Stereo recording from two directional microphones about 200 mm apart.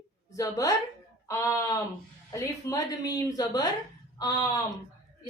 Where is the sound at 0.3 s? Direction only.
15° left (ahead or behind).